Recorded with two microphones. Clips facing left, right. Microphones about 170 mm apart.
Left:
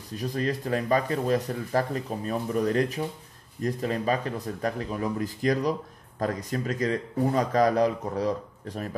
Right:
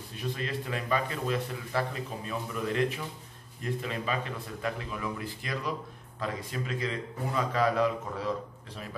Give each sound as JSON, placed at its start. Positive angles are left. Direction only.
{"t": 0.1, "sound": "speech", "side_deg": 40}